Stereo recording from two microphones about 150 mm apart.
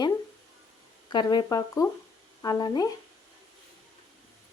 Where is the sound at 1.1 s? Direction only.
30° left (ahead or behind).